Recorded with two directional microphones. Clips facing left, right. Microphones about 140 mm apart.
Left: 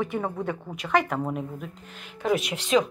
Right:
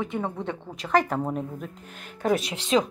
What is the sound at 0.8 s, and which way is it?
Speech, 35° right (ahead or behind).